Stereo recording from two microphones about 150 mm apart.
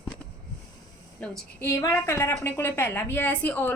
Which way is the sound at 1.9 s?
15° left (ahead or behind).